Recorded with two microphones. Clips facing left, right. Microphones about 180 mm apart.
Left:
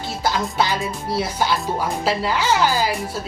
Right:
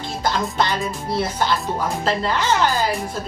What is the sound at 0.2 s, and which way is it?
A woman's voice, 5° left (ahead or behind).